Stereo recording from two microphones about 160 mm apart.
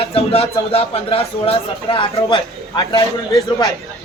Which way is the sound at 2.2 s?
25° left (ahead or behind).